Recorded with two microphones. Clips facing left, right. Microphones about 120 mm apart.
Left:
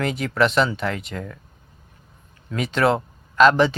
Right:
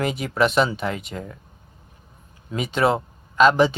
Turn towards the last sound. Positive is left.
turn(degrees=-5)  # may be behind; listen again after turning